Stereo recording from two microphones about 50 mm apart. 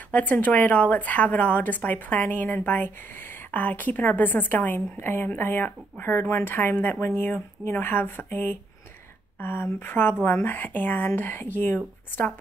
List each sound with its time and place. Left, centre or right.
0.1 s speech: left
6.4 s speech: left